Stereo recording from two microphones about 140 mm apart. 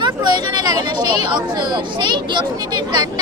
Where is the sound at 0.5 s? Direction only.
30° right (ahead or behind).